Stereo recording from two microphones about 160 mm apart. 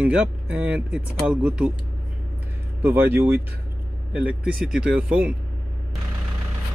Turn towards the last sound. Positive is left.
turn(degrees=-10)  # may be behind; listen again after turning